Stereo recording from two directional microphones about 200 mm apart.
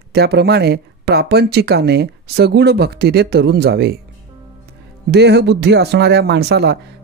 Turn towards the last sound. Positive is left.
turn(degrees=-55)  # may be behind; listen again after turning